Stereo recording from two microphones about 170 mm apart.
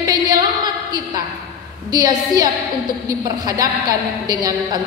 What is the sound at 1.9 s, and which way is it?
A woman's voice, 20° right (ahead or behind).